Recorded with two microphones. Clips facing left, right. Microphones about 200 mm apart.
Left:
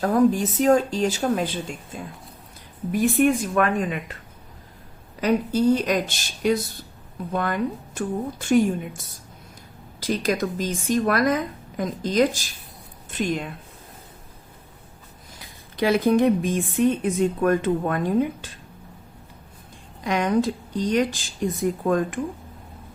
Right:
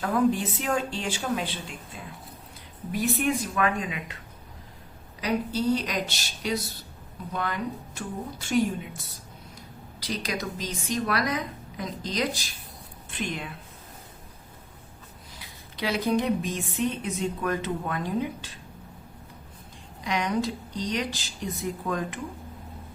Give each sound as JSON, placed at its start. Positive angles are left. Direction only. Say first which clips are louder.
{"t": 0.0, "sound": "speech", "louder": "left 5 dB", "side_deg": 40}
{"t": 5.2, "sound": "speech", "louder": "left 6 dB", "side_deg": 50}
{"t": 10.0, "sound": "a woman's voice", "louder": "left 8 dB", "side_deg": 45}
{"t": 15.4, "sound": "speech", "louder": "left 9 dB", "side_deg": 50}
{"t": 20.1, "sound": "speech", "louder": "left 6 dB", "side_deg": 50}